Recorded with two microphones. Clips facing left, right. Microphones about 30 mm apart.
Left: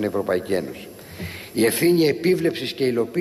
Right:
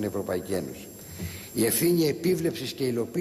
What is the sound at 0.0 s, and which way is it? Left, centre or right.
A man's voice, left.